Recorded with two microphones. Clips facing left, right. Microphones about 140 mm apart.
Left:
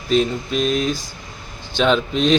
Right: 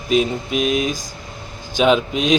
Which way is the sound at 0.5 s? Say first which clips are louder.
Right 1 dB; 10° right (ahead or behind).